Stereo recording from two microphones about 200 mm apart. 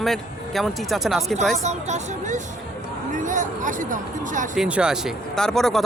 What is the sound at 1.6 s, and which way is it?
Speech, 35° right (ahead or behind).